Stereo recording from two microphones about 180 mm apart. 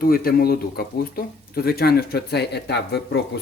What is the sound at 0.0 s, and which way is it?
Speech, 55° left (ahead or behind).